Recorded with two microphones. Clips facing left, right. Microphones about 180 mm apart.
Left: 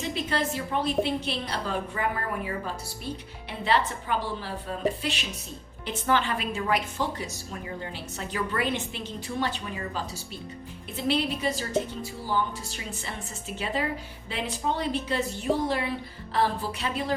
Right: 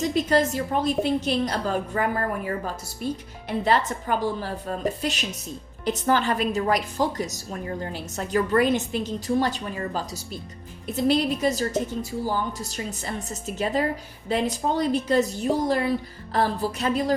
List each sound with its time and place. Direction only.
0.1 s a woman's voice: 40° right (ahead or behind)
3.6 s a woman's voice: 45° right (ahead or behind)